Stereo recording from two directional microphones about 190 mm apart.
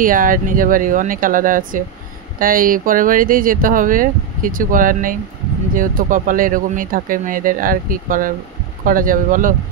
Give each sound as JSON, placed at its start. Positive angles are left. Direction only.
{"t": 0.0, "sound": "speech", "side_deg": -45}